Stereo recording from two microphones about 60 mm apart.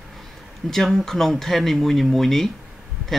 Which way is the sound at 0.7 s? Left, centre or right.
Centre.